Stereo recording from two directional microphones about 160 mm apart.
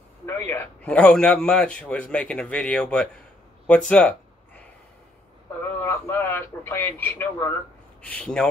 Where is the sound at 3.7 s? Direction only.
5° left (ahead or behind).